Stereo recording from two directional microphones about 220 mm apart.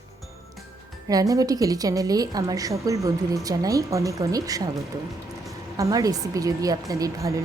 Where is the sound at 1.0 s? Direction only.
15° right (ahead or behind).